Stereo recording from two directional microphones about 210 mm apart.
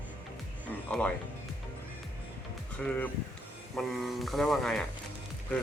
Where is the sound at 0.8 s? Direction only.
5° left (ahead or behind).